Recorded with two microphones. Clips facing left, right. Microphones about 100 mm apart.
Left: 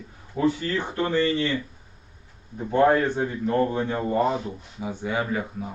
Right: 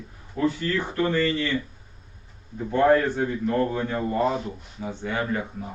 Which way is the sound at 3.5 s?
20° left (ahead or behind).